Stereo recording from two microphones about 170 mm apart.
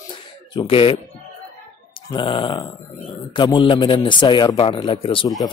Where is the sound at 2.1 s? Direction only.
30° left (ahead or behind).